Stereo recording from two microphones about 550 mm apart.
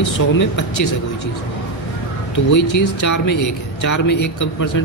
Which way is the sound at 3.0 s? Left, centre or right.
Left.